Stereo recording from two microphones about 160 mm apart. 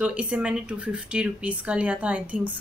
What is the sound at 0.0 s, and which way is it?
Speech, 10° right (ahead or behind).